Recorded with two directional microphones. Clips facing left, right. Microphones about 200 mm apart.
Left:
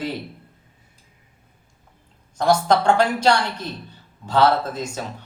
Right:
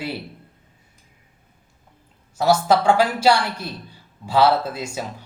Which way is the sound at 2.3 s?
5° right (ahead or behind).